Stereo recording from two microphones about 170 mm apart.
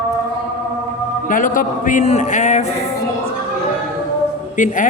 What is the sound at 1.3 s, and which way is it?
A man's voice, 50° left (ahead or behind).